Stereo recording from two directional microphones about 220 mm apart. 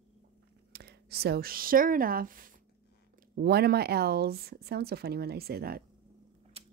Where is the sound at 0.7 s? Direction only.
45° right (ahead or behind).